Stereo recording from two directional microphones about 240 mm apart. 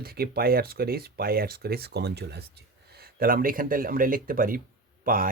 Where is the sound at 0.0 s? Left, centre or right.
Right.